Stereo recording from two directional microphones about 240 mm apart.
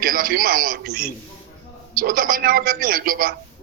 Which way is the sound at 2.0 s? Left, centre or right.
Right.